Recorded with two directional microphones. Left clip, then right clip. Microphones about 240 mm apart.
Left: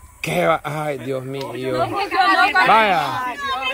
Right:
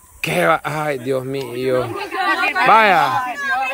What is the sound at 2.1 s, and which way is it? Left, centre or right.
Speech, left.